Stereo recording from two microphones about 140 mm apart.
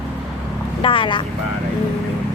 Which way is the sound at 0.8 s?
40° left (ahead or behind).